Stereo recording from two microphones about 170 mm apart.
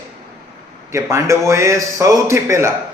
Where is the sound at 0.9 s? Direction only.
15° right (ahead or behind).